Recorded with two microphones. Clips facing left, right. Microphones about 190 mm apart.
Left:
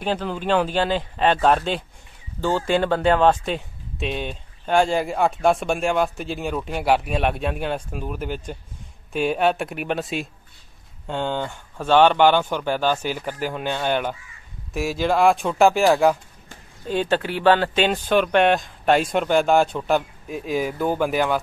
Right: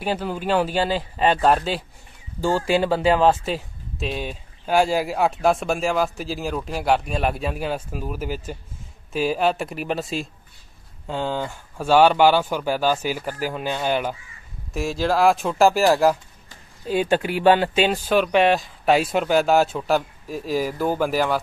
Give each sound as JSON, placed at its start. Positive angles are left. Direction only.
{"t": 0.0, "sound": "speech", "side_deg": -10}